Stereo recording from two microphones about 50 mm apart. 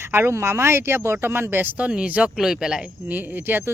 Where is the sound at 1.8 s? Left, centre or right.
Right.